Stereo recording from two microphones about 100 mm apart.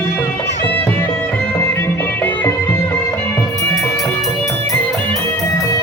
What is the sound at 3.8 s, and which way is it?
Music, 35° left (ahead or behind).